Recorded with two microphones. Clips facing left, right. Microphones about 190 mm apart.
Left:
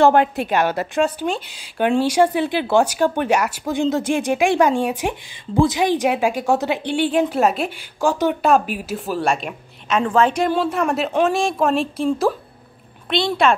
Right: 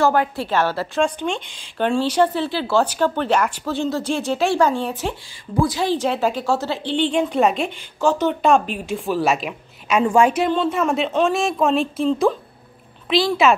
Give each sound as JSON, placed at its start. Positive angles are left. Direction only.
{"t": 0.1, "sound": "speech", "side_deg": 20}
{"t": 1.0, "sound": "a woman's voice", "side_deg": 5}
{"t": 10.5, "sound": "a woman's voice", "side_deg": 5}
{"t": 13.1, "sound": "a woman's voice", "side_deg": -5}